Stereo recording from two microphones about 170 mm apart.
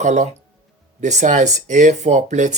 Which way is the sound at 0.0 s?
45° right (ahead or behind).